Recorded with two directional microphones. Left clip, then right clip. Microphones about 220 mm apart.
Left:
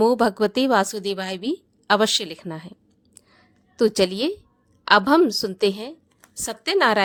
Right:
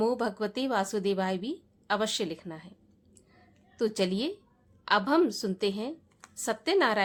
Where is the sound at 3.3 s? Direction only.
30° left (ahead or behind).